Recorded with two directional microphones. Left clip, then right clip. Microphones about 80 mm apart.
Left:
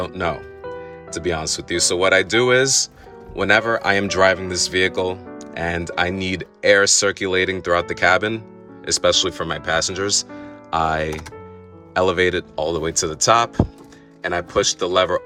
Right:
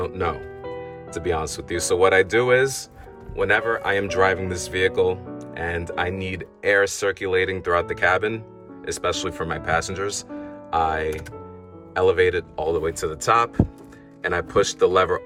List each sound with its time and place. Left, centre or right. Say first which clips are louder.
0.0 s speech: left 2 dB; left
14.2 s speech: left 1 dB; left